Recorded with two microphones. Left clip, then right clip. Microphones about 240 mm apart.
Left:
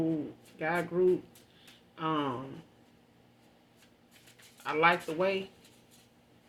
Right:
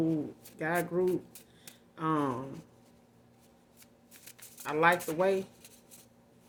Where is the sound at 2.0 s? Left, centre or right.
Right.